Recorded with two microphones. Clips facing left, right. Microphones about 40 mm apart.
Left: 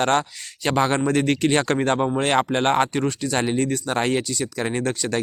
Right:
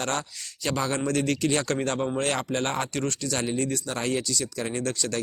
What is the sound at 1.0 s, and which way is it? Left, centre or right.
Speech, left.